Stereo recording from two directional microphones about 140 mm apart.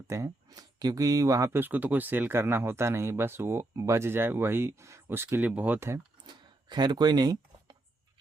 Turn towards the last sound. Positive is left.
turn(degrees=-30)  # may be behind; listen again after turning